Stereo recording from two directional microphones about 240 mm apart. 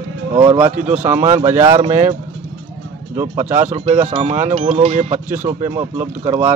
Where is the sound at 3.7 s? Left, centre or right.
Right.